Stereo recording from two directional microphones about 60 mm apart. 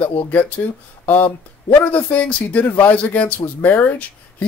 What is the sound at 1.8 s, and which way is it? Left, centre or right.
Speech, left.